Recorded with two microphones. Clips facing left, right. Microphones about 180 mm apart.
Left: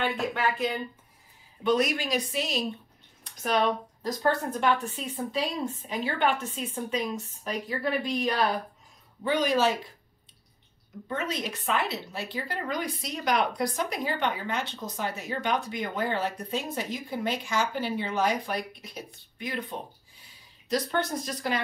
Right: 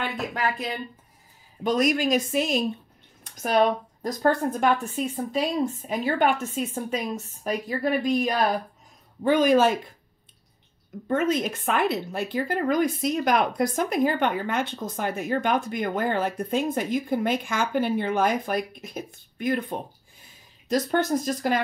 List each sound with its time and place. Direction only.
0.0 s speech: 35° right (ahead or behind)
4.0 s speech: 45° right (ahead or behind)
11.1 s speech: 50° right (ahead or behind)